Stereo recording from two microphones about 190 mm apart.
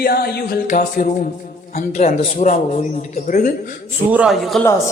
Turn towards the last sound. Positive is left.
turn(degrees=0)  # may be behind; listen again after turning